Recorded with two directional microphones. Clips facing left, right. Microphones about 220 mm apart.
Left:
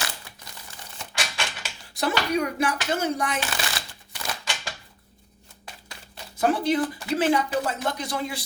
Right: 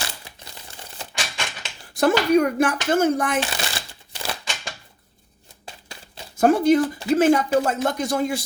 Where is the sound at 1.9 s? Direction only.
50° right (ahead or behind).